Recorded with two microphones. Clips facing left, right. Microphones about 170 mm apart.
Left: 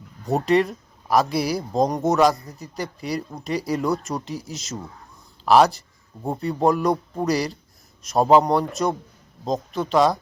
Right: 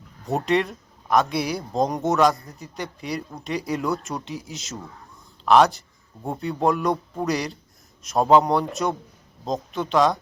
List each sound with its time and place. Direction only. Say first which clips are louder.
0.3 s speech: left 3 dB; centre (ahead or behind)